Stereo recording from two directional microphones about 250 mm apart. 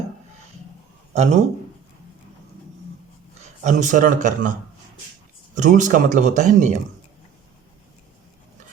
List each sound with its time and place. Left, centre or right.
1.1 s a man's voice: right
3.6 s speech: right
5.5 s speech: right